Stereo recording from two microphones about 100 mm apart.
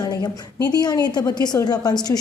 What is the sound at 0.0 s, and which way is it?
A woman's voice, 40° left (ahead or behind).